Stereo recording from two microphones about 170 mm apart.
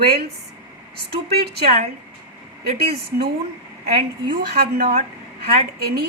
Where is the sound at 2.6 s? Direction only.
70° right (ahead or behind).